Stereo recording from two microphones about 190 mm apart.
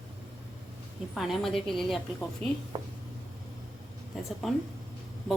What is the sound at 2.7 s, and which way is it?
Speech, 30° right (ahead or behind).